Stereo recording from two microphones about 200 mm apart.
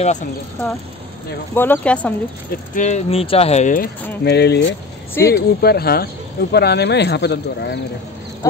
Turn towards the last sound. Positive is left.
turn(degrees=60)  # may be behind; listen again after turning